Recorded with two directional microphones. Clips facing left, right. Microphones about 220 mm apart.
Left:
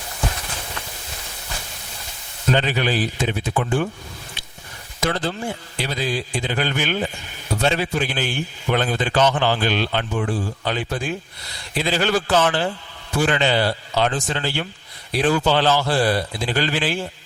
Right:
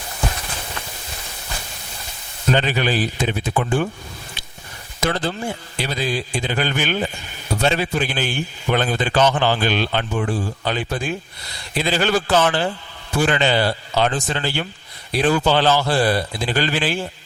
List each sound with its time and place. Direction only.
2.6 s a man's voice: 15° right (ahead or behind)
4.9 s a man's voice: 15° right (ahead or behind)